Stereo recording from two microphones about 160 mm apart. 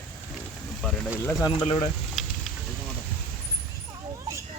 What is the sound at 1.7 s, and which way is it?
Speech, 45° left (ahead or behind).